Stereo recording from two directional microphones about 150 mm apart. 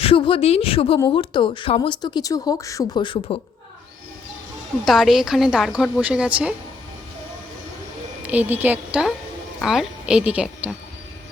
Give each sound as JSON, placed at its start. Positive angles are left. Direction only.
{"t": 0.0, "sound": "speech", "side_deg": 35}
{"t": 4.9, "sound": "a woman's voice", "side_deg": 0}
{"t": 8.2, "sound": "a woman's voice", "side_deg": -10}